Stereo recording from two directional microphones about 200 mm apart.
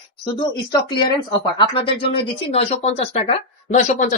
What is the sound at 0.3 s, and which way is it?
Speech, 25° left (ahead or behind).